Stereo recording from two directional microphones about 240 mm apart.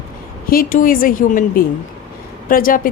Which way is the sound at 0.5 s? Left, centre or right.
Left.